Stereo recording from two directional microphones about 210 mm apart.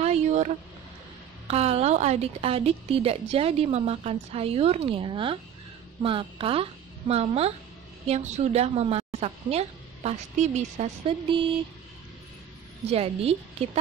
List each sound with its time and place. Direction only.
0.0 s vehicle: 30° right (ahead or behind)
1.5 s a woman's voice: 30° right (ahead or behind)
12.9 s a woman's voice: 30° right (ahead or behind)